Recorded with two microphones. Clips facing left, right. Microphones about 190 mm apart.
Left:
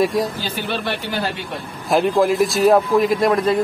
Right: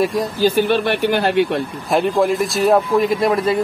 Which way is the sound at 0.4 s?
45° right (ahead or behind).